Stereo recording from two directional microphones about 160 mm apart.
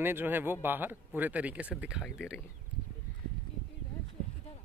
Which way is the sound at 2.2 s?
15° left (ahead or behind).